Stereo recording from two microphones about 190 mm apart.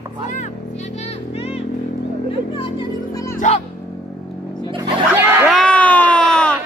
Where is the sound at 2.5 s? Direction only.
20° left (ahead or behind).